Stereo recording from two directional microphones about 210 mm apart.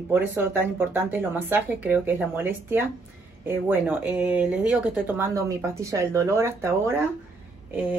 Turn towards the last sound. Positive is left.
turn(degrees=-10)  # may be behind; listen again after turning